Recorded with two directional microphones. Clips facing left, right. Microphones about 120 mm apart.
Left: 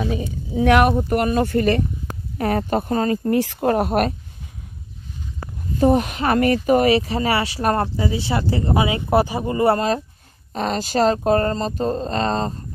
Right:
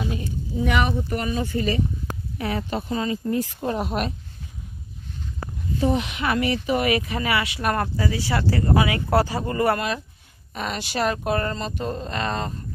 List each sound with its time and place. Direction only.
0.6 s speech: 70° left (ahead or behind)
0.9 s speech: 50° left (ahead or behind)
2.3 s speech: 50° left (ahead or behind)
3.3 s speech: 75° left (ahead or behind); by 4.1 s 55° left (ahead or behind)
5.8 s speech: 45° left (ahead or behind)
6.9 s speech: 30° left (ahead or behind)